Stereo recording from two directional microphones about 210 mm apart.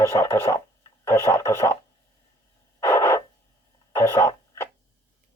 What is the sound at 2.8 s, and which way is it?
Radio, 10° left (ahead or behind).